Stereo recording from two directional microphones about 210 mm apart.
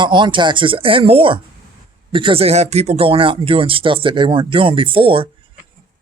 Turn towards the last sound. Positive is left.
turn(degrees=-25)  # may be behind; listen again after turning